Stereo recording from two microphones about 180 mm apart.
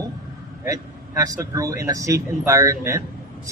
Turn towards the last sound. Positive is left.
turn(degrees=-15)  # may be behind; listen again after turning